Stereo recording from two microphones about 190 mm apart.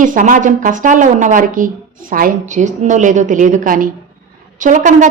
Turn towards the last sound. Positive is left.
turn(degrees=-40)  # may be behind; listen again after turning